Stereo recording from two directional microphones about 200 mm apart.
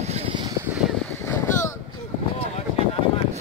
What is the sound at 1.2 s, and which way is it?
Boat, 15° left (ahead or behind).